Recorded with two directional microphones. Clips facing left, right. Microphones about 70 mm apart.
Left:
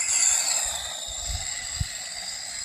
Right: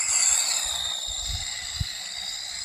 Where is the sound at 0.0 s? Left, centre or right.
Centre.